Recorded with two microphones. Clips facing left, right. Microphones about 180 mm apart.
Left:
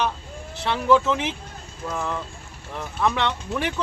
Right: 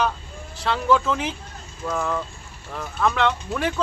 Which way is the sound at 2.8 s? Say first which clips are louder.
Even; 20° left (ahead or behind).